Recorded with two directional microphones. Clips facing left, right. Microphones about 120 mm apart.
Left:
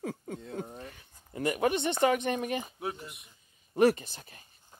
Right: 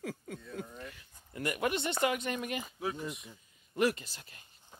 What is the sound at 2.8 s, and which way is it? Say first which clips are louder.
Speech: right 1 dB; 60° left (ahead or behind).